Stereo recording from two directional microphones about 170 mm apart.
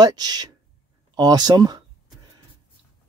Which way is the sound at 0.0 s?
25° right (ahead or behind).